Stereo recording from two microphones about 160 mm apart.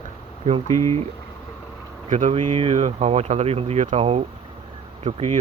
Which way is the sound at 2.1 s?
50° right (ahead or behind).